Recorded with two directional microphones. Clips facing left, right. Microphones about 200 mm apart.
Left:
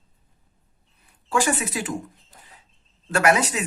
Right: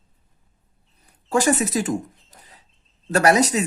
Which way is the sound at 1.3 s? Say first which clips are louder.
Right 4 dB; 40° right (ahead or behind).